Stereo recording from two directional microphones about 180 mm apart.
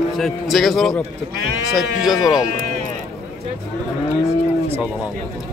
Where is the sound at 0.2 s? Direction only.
Centre (ahead or behind).